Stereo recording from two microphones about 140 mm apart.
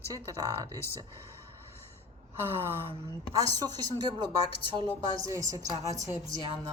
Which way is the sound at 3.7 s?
35° right (ahead or behind).